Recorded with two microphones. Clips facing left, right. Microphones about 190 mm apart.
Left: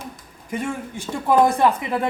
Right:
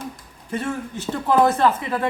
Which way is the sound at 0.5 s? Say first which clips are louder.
Right 1 dB; 15° left (ahead or behind).